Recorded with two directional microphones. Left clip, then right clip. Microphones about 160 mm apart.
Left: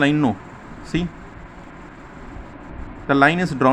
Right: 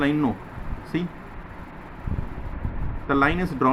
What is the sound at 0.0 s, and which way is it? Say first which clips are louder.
Speech: left 5 dB; 40° left (ahead or behind).